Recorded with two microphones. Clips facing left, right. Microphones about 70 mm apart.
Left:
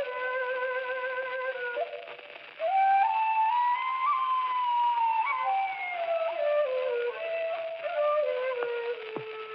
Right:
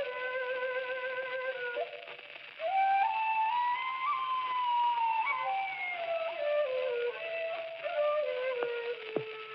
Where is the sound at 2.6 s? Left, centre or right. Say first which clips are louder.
Left 5 dB; left.